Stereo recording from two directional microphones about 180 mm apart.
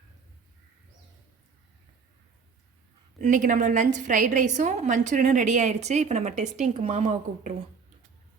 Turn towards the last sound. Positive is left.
turn(degrees=-40)  # may be behind; listen again after turning